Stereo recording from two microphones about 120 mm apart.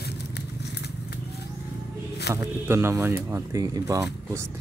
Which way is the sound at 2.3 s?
20° right (ahead or behind).